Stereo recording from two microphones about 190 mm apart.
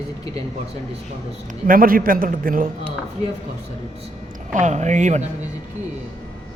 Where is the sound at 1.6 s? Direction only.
50° right (ahead or behind).